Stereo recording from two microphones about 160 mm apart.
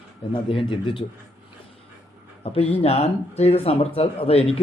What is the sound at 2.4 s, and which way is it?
Speech, 40° left (ahead or behind).